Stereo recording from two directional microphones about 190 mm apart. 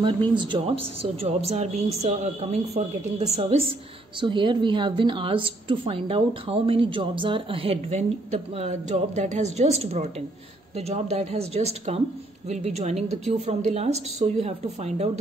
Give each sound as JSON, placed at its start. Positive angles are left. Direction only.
{"t": 0.4, "sound": "a woman's voice", "side_deg": -25}